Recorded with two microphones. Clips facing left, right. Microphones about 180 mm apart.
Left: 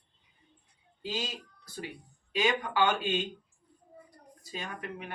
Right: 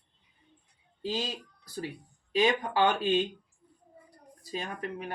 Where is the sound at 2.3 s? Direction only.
35° right (ahead or behind).